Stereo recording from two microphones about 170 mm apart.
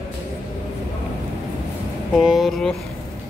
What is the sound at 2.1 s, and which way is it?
Speech, centre (ahead or behind).